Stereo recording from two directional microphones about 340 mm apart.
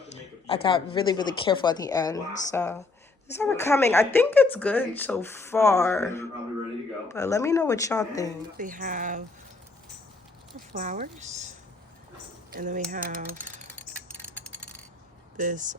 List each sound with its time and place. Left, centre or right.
0.4 s speech: centre
8.5 s speech: right
10.5 s speech: right
12.5 s speech: right
13.7 s a sound: centre
15.4 s speech: right